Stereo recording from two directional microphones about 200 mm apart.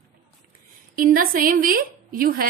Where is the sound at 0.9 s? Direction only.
45° right (ahead or behind).